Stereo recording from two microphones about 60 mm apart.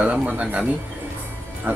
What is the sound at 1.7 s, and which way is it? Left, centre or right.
Speech, right.